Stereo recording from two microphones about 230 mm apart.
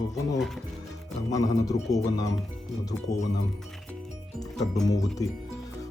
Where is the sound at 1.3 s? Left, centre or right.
Centre.